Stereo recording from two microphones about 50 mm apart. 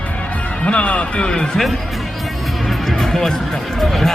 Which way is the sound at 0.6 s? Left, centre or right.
Left.